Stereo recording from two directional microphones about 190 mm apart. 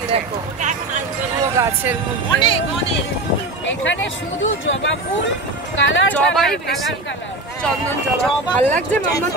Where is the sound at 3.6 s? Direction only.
75° left (ahead or behind).